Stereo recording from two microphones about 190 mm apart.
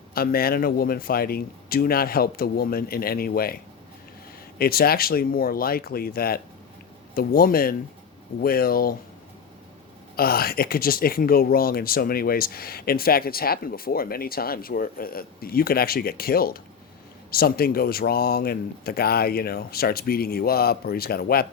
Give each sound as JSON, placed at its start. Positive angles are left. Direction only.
{"t": 0.1, "sound": "speech", "side_deg": 50}
{"t": 10.2, "sound": "speech", "side_deg": 55}